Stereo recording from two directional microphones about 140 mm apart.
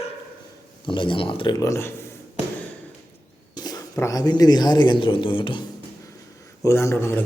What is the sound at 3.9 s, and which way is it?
Speech, 25° left (ahead or behind).